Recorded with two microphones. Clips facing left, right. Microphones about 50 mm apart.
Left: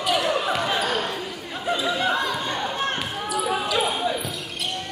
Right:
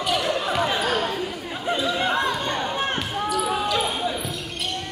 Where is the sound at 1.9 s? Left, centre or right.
Centre.